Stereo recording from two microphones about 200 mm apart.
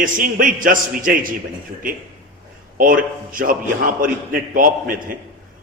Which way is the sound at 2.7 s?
45° right (ahead or behind).